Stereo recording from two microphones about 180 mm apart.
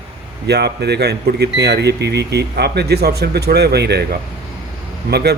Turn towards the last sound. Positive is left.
turn(degrees=-65)  # may be behind; listen again after turning